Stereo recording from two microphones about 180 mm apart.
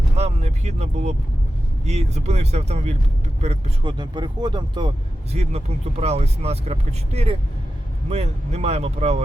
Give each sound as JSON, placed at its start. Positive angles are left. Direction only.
{"t": 0.2, "sound": "vehicle", "side_deg": -35}
{"t": 1.8, "sound": "speech", "side_deg": -35}
{"t": 3.8, "sound": "speech", "side_deg": -25}
{"t": 5.3, "sound": "speech", "side_deg": -35}